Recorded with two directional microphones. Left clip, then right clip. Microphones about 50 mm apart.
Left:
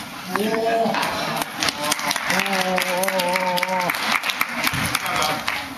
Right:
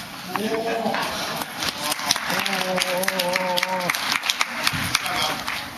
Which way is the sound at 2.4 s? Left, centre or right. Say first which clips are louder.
Left 2 dB; right.